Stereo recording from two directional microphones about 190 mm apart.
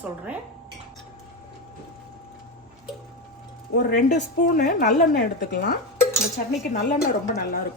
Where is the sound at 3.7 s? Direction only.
45° left (ahead or behind).